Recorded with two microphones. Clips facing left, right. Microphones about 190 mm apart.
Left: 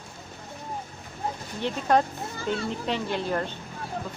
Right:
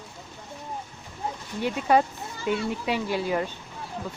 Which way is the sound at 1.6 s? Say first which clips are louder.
Right 1 dB; 5° right (ahead or behind).